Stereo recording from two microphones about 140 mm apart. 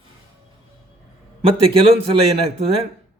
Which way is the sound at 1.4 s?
40° right (ahead or behind).